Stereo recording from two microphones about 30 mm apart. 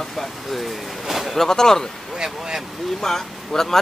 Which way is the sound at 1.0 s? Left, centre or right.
Centre.